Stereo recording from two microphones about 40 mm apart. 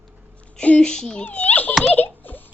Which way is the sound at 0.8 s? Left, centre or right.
Centre.